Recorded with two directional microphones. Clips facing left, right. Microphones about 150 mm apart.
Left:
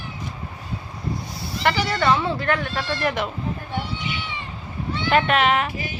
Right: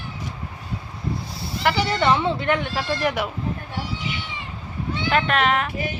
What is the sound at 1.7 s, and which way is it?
Speech, 20° right (ahead or behind).